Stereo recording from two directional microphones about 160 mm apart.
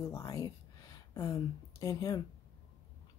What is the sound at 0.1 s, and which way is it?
Speech, 20° left (ahead or behind).